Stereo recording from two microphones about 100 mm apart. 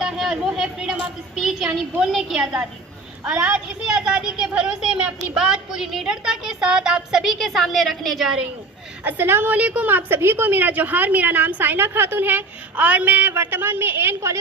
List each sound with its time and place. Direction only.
0.0 s a woman's voice: 5° right (ahead or behind)
9.0 s a woman's voice: 20° right (ahead or behind)